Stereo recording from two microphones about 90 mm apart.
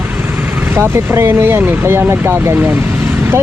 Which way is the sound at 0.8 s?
30° right (ahead or behind).